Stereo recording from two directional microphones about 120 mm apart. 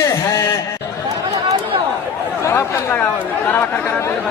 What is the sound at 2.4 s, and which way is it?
Speech, 25° left (ahead or behind).